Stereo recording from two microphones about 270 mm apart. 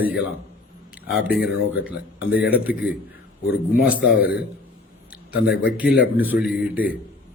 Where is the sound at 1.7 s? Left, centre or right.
Centre.